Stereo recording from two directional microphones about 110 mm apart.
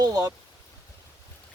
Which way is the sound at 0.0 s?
35° right (ahead or behind).